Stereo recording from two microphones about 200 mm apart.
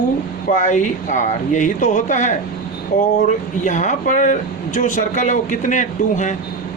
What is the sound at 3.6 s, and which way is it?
Speech, 40° left (ahead or behind).